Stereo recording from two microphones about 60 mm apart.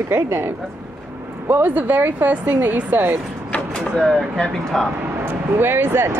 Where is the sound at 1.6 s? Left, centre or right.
Right.